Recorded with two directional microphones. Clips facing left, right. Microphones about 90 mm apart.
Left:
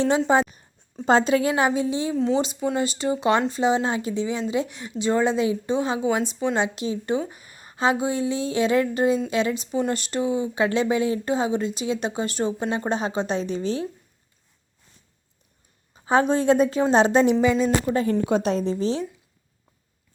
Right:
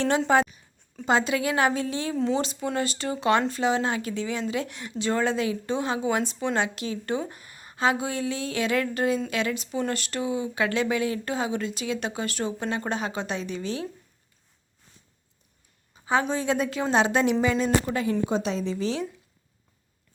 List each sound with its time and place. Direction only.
0.3 s speech: 20° left (ahead or behind)
1.0 s speech: 35° left (ahead or behind); by 2.1 s 20° left (ahead or behind)
2.1 s speech: centre (ahead or behind)
2.4 s speech: 15° left (ahead or behind)
16.2 s a woman's voice: 50° left (ahead or behind); by 17.3 s 30° left (ahead or behind)
17.4 s speech: 10° left (ahead or behind)
17.9 s a woman's voice: 45° left (ahead or behind)
18.3 s speech: 55° left (ahead or behind); by 19.0 s 35° left (ahead or behind)